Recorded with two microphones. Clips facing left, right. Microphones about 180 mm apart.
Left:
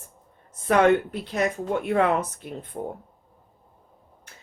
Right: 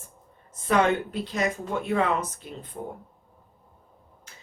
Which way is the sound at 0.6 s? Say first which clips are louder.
Left 4 dB; 60° left (ahead or behind).